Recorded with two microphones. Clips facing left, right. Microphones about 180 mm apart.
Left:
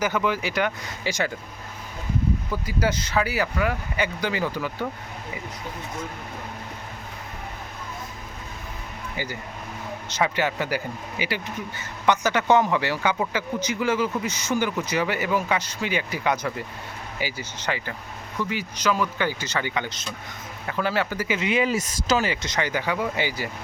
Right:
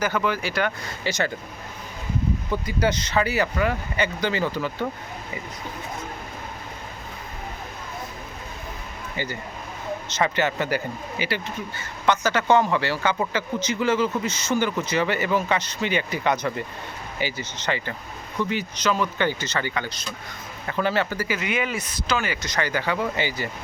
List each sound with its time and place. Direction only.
0.0 s speech: 15° left (ahead or behind)
2.5 s speech: 5° left (ahead or behind)
9.1 s speech: 10° left (ahead or behind)
20.7 s speech: 5° left (ahead or behind); by 22.3 s 40° left (ahead or behind)
22.3 s speech: 25° left (ahead or behind); by 23.5 s 10° left (ahead or behind)